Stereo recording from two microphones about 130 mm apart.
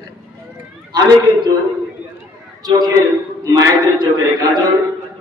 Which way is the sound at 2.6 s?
30° right (ahead or behind).